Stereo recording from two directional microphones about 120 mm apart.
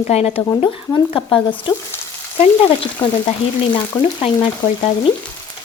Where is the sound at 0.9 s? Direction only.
40° left (ahead or behind).